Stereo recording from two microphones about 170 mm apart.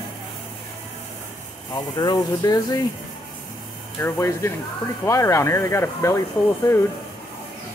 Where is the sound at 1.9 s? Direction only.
25° left (ahead or behind).